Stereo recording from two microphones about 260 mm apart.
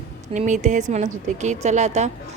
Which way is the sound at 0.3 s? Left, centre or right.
Right.